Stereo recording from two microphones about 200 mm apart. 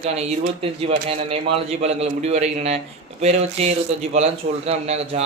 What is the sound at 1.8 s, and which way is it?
A man's voice, 30° right (ahead or behind).